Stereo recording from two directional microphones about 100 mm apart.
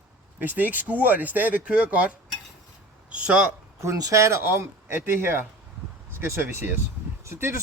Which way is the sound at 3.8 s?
35° right (ahead or behind).